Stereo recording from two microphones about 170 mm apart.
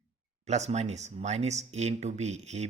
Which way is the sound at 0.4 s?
40° right (ahead or behind).